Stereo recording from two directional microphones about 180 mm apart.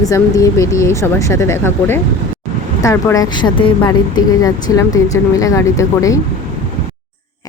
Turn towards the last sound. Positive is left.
turn(degrees=15)  # may be behind; listen again after turning